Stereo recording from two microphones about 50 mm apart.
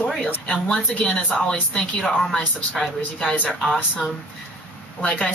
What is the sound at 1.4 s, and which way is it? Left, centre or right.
Speech, centre.